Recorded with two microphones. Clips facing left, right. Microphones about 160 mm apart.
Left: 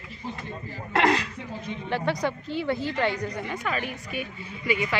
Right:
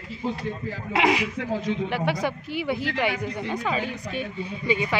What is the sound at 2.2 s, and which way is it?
Speech, 10° right (ahead or behind).